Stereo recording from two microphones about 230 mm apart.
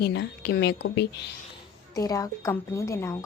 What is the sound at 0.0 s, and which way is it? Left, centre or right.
A woman's voice, left.